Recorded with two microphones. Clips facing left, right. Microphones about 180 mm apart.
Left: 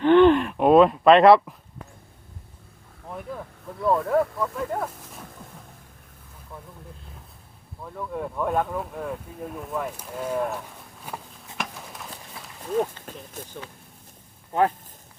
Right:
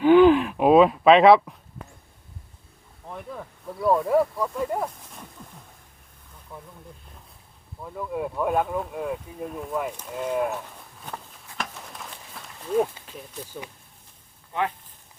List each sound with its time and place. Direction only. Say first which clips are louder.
0.0 s speech: right 1 dB; 5° right (ahead or behind)
3.8 s speech: right 1 dB; 5° right (ahead or behind)
6.5 s speech: even; centre (ahead or behind)
7.8 s speech: right 2 dB; 10° right (ahead or behind)
11.1 s a sound: left 1 dB; 10° left (ahead or behind)
12.7 s speech: right 2 dB; 10° right (ahead or behind)
14.5 s speech: left 6 dB; 45° left (ahead or behind)